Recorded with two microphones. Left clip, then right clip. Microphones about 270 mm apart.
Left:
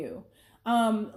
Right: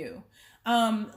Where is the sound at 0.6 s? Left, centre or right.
Right.